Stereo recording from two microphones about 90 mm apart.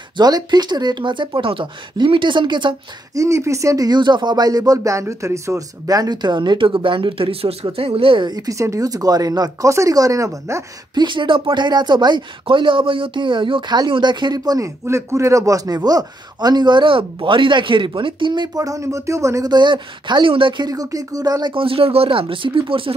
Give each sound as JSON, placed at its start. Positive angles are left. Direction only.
{"t": 0.2, "sound": "speech", "side_deg": -50}
{"t": 3.2, "sound": "a man's voice", "side_deg": -35}
{"t": 8.3, "sound": "speech", "side_deg": -45}
{"t": 11.0, "sound": "speech", "side_deg": -65}
{"t": 14.9, "sound": "a man's voice", "side_deg": -30}
{"t": 19.5, "sound": "a man's voice", "side_deg": -60}
{"t": 21.5, "sound": "speech", "side_deg": -85}